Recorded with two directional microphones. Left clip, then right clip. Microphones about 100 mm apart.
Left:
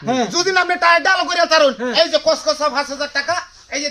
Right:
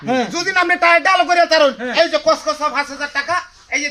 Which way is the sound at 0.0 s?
20° left (ahead or behind).